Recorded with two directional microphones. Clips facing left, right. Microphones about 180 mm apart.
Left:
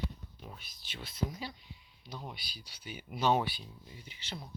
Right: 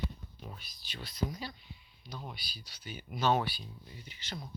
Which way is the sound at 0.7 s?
20° left (ahead or behind).